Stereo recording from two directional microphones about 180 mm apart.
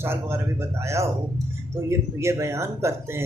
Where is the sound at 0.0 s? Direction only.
15° right (ahead or behind).